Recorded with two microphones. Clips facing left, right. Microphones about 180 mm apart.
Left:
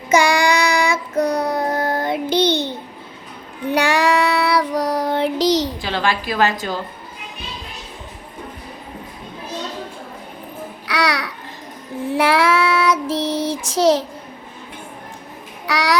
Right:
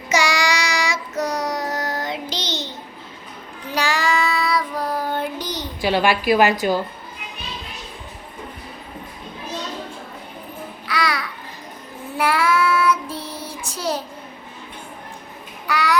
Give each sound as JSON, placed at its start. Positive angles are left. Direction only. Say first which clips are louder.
{"t": 0.1, "sound": "child singing", "louder": "left 5 dB", "side_deg": 55}
{"t": 5.8, "sound": "a woman's voice", "louder": "right 3 dB", "side_deg": -15}
{"t": 10.8, "sound": "babbling", "louder": "left 3 dB", "side_deg": 75}
{"t": 12.1, "sound": "child singing", "louder": "left 3 dB", "side_deg": 85}
{"t": 15.7, "sound": "child singing", "louder": "left 2 dB", "side_deg": 85}